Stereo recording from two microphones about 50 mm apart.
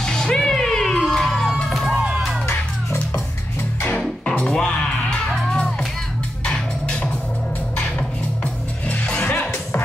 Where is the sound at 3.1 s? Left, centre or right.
Left.